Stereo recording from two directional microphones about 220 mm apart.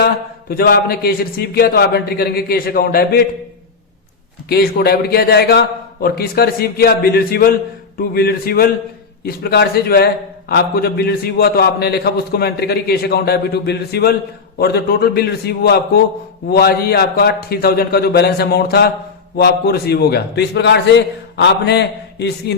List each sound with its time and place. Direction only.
0.5 s a man's voice: 40° left (ahead or behind)
4.4 s a man's voice: 45° left (ahead or behind)